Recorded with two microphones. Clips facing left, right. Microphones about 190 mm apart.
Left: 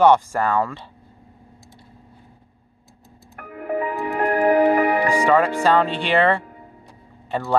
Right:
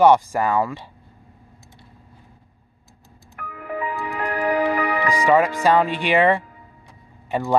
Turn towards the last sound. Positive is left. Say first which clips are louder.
# right 1 dB
turn(degrees=-15)  # may be behind; listen again after turning